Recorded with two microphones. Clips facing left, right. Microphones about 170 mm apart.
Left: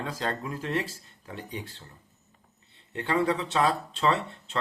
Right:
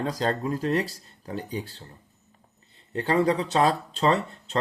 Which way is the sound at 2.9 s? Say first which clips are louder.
Right 4 dB; 35° right (ahead or behind).